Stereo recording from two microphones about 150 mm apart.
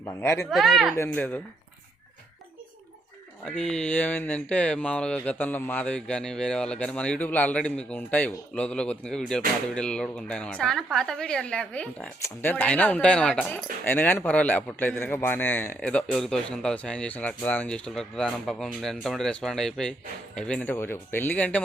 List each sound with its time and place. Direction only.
0.2 s speech: 20° left (ahead or behind)
0.5 s speech: centre (ahead or behind)
0.9 s a man's voice: 15° left (ahead or behind)
3.4 s a man's voice: 5° left (ahead or behind)